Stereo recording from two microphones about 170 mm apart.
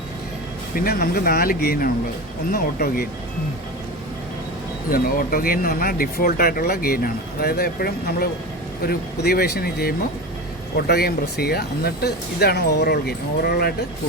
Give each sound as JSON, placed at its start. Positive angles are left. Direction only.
{"t": 0.9, "sound": "speech", "side_deg": 65}
{"t": 4.9, "sound": "speech", "side_deg": 60}